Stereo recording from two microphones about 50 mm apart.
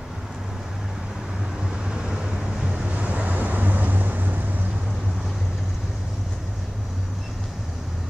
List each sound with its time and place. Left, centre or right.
2.6 s vehicle: centre
3.0 s vehicle: right